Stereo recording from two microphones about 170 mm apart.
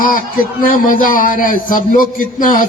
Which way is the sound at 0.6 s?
55° left (ahead or behind).